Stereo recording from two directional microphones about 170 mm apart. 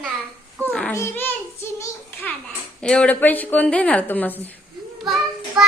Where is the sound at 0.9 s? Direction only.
15° left (ahead or behind).